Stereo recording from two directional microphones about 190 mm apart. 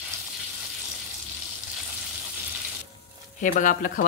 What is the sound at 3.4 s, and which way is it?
Speech, 45° left (ahead or behind).